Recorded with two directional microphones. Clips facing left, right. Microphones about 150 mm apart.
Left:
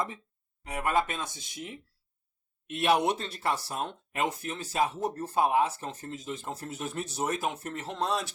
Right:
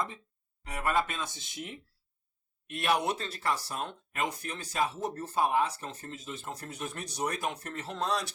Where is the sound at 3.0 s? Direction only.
10° left (ahead or behind).